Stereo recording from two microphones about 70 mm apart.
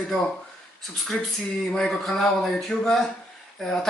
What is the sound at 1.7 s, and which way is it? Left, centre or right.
A man's voice, centre.